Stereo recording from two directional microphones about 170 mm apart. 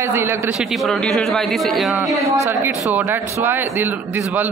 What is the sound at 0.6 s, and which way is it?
Speech, centre (ahead or behind).